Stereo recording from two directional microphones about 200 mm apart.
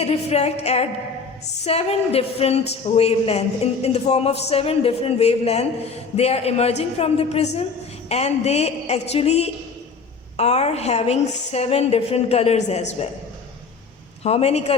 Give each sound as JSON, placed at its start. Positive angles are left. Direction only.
{"t": 0.0, "sound": "speech", "side_deg": 30}
{"t": 14.3, "sound": "speech", "side_deg": 30}